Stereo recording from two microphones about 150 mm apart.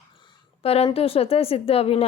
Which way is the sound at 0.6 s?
40° left (ahead or behind).